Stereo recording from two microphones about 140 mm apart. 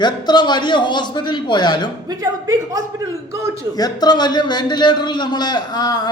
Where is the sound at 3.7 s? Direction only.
30° left (ahead or behind).